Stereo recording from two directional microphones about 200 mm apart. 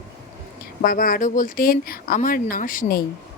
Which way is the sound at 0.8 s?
45° left (ahead or behind).